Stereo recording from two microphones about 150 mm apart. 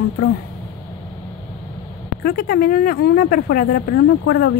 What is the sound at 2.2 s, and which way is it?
Speech, 80° left.